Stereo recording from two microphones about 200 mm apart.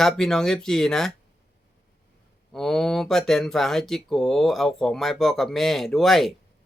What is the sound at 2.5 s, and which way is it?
Speech, centre (ahead or behind).